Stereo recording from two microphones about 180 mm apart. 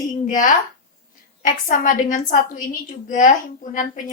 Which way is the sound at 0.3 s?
45° left (ahead or behind).